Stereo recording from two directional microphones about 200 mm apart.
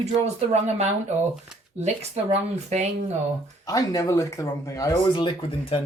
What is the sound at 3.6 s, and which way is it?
Speech, 15° left (ahead or behind).